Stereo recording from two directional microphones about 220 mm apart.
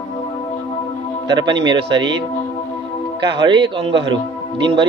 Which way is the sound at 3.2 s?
20° right (ahead or behind).